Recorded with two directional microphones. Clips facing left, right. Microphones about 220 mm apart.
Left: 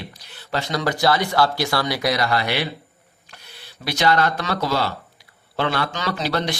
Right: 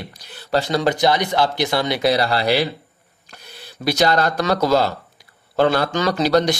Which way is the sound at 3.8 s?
40° right (ahead or behind).